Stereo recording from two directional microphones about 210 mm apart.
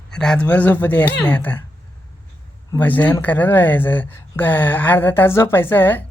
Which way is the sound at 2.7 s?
10° left (ahead or behind).